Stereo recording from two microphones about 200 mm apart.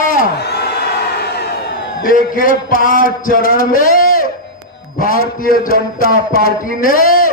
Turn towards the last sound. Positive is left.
turn(degrees=45)  # may be behind; listen again after turning